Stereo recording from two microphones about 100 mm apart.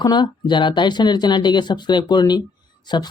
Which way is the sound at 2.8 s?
45° left (ahead or behind).